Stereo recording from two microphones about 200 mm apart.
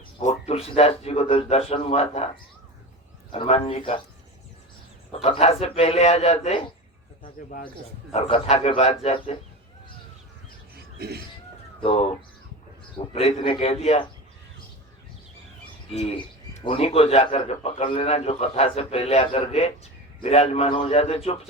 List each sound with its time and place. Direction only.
0.2 s a man's voice: 35° left (ahead or behind)
5.1 s speech: 30° left (ahead or behind)
7.4 s speech: 40° left (ahead or behind)
8.1 s a man's voice: 30° left (ahead or behind)
10.9 s speech: 55° right (ahead or behind)
13.1 s speech: 30° left (ahead or behind)
15.9 s speech: 30° left (ahead or behind)